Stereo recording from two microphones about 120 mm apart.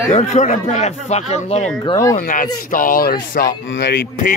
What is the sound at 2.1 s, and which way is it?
Speech, 90° left.